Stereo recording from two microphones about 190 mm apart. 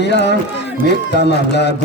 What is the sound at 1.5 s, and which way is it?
Music, 65° left (ahead or behind).